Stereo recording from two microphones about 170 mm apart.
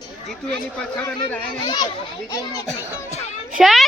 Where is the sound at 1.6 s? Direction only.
25° left (ahead or behind).